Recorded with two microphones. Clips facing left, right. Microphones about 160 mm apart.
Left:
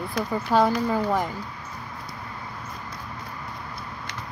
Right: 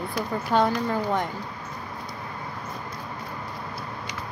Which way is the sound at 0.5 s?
5° left (ahead or behind).